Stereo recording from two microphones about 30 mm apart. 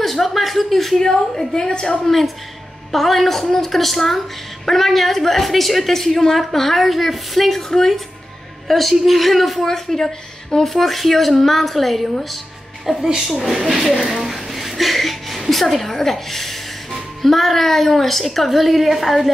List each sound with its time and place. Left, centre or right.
0.0 s a sound: centre
0.9 s a woman's voice: centre
2.9 s a woman's voice: centre
9.7 s a woman's voice: centre
10.7 s a woman's voice: centre
12.9 s a woman's voice: centre
14.2 s music: centre
15.5 s a woman's voice: centre